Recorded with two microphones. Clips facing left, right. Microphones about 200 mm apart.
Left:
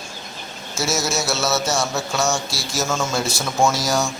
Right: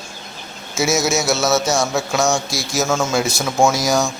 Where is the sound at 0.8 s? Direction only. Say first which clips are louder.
Right 5 dB; 10° right (ahead or behind).